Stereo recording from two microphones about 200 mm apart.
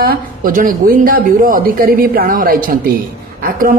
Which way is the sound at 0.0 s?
45° right (ahead or behind).